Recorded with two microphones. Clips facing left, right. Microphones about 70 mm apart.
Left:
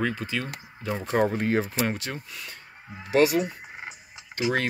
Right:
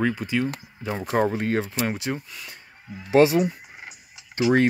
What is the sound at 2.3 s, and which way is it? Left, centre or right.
Speech, centre.